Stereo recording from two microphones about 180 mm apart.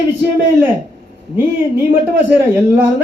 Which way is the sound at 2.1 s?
10° right (ahead or behind).